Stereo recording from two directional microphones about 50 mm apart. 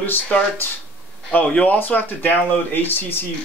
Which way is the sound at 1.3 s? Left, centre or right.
Left.